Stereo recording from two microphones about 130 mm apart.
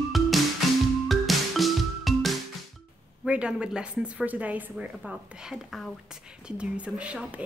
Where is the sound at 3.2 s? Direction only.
5° right (ahead or behind).